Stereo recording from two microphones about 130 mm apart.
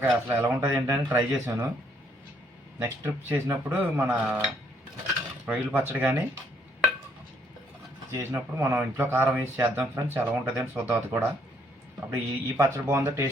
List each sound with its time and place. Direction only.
0.0 s speech: 15° right (ahead or behind)
2.7 s speech: 15° right (ahead or behind)
5.5 s speech: 15° right (ahead or behind)
8.1 s speech: 20° right (ahead or behind)